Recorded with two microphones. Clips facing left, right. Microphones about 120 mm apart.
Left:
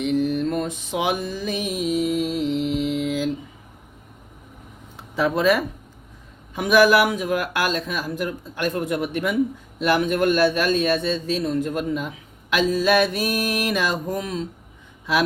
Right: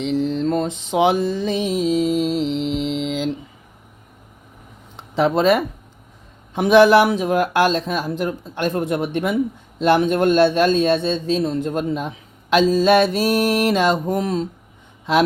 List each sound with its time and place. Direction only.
0.0 s mantra: 25° right (ahead or behind)
4.9 s speech: 25° right (ahead or behind)